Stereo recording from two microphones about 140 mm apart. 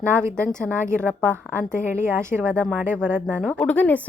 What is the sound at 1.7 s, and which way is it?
A woman's voice, 15° right (ahead or behind).